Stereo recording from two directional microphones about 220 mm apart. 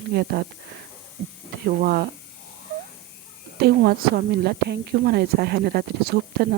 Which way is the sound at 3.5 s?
45° right (ahead or behind).